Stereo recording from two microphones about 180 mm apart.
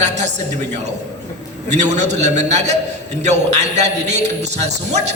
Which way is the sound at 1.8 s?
40° right (ahead or behind).